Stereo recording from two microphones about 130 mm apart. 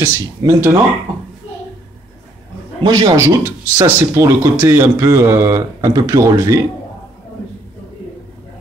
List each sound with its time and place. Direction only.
0.0 s speech: 20° right (ahead or behind)
2.8 s speech: 30° right (ahead or behind)